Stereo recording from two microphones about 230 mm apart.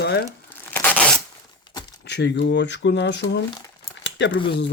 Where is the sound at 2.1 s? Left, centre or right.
Left.